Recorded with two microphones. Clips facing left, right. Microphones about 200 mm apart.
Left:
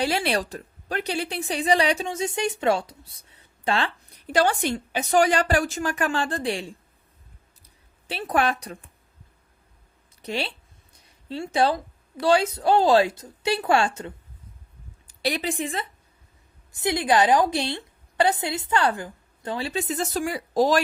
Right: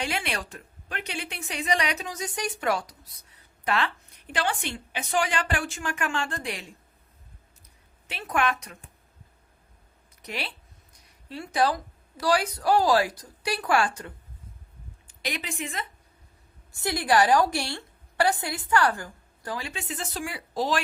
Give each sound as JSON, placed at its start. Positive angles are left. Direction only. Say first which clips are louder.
{"t": 0.0, "sound": "speech", "louder": "left 7 dB", "side_deg": 35}
{"t": 7.6, "sound": "a sound", "louder": "even", "side_deg": 30}
{"t": 10.2, "sound": "a woman's voice", "louder": "left 6 dB", "side_deg": 30}
{"t": 10.9, "sound": "a sound", "louder": "left 6 dB", "side_deg": 25}
{"t": 12.2, "sound": "a woman's voice", "louder": "left 4 dB", "side_deg": 25}
{"t": 15.0, "sound": "a woman's voice", "louder": "left 8 dB", "side_deg": 35}
{"t": 16.7, "sound": "a woman's voice", "louder": "left 2 dB", "side_deg": 20}